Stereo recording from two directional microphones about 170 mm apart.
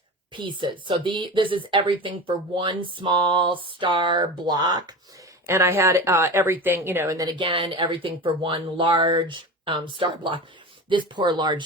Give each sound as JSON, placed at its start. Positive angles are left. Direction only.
{"t": 0.3, "sound": "speech", "side_deg": -30}